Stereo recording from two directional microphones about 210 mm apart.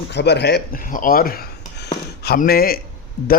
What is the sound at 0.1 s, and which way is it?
A man's voice, 55° left (ahead or behind).